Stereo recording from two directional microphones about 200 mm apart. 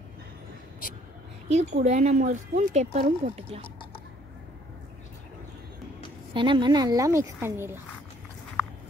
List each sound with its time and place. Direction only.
1.5 s speech: 35° right (ahead or behind)
6.3 s a woman's voice: 25° right (ahead or behind)